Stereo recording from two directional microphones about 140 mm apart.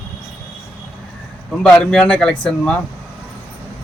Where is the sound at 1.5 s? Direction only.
5° left (ahead or behind).